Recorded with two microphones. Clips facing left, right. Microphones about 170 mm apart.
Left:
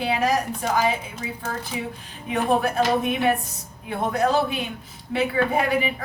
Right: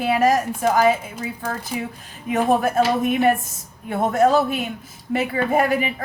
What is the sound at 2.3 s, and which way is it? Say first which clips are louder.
Speech: right 3 dB; 45° right (ahead or behind).